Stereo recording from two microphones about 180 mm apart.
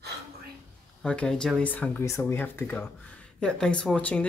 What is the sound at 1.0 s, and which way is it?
Speech, 5° left (ahead or behind).